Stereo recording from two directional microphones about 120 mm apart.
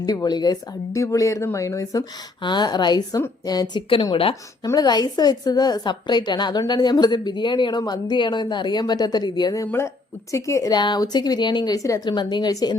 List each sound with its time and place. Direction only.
0.0 s a woman's voice: 35° left (ahead or behind)
4.6 s a woman's voice: 30° left (ahead or behind)